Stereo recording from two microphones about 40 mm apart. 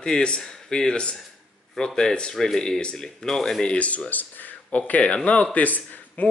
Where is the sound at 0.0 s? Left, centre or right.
Left.